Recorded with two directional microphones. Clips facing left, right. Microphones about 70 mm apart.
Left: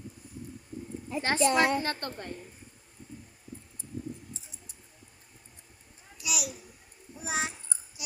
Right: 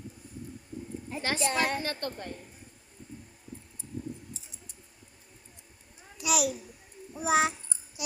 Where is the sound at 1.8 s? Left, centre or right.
Left.